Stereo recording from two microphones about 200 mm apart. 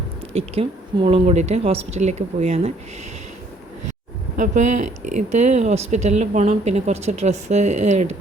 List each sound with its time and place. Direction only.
0.3 s speech: 30° right (ahead or behind)
4.4 s speech: 35° right (ahead or behind)